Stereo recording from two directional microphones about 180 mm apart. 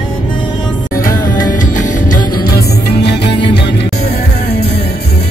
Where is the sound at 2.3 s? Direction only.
55° left (ahead or behind).